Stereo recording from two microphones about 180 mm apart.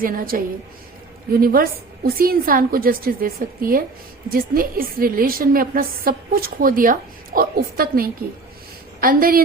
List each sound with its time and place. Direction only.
0.0 s a woman's voice: 50° right (ahead or behind)